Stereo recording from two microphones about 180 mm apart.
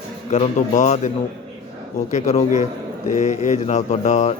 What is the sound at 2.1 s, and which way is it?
A man's voice, 40° left (ahead or behind).